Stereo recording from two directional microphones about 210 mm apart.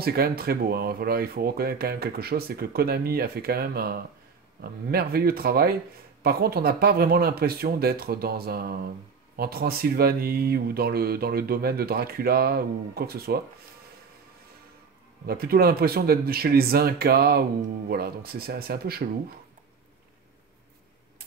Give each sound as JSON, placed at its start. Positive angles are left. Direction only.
{"t": 0.0, "sound": "speech", "side_deg": -45}
{"t": 15.2, "sound": "speech", "side_deg": -45}